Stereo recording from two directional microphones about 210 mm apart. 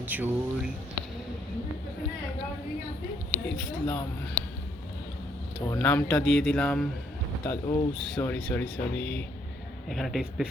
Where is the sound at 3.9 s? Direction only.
5° left (ahead or behind).